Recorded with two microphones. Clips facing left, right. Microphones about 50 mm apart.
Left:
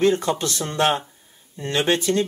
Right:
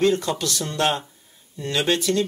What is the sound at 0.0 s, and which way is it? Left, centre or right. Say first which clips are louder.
Speech: left 1 dB; left.